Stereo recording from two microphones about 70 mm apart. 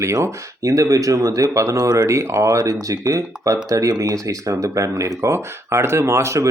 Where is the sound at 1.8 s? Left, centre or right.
Right.